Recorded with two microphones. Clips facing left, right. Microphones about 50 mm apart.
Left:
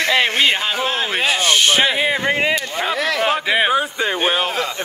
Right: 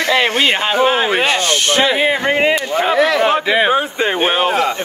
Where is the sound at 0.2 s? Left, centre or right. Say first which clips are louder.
Right 2 dB; right.